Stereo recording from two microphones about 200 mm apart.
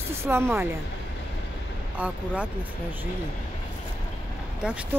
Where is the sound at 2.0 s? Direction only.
5° right (ahead or behind).